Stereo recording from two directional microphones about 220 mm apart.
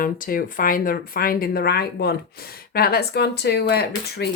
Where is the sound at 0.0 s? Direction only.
40° left (ahead or behind).